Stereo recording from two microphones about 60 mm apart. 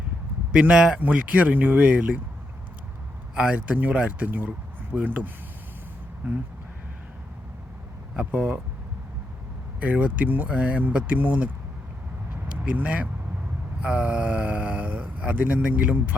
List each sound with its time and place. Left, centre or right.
0.7 s speech: centre
0.9 s speech: right
3.3 s speech: centre
8.1 s speech: right
9.8 s speech: right
12.7 s speech: right